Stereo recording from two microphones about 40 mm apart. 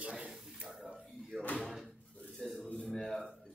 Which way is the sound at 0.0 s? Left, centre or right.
Right.